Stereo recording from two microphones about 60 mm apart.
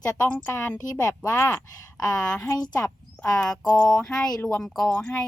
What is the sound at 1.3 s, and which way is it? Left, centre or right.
Speech, left.